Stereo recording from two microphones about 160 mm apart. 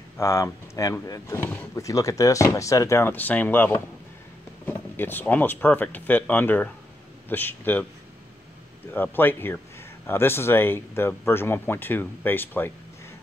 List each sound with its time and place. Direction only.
0.2 s speech: 20° left (ahead or behind)
8.9 s speech: 10° left (ahead or behind)